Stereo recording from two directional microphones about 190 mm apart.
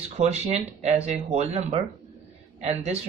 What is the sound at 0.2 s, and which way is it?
Speech, 35° right (ahead or behind).